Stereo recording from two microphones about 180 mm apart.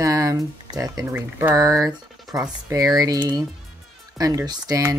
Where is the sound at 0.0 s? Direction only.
20° right (ahead or behind).